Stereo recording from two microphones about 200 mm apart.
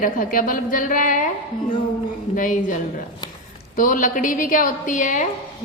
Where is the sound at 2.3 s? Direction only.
40° left (ahead or behind).